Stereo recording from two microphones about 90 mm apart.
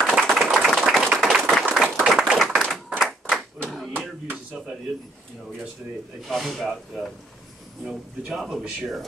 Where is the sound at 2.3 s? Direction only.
Centre (ahead or behind).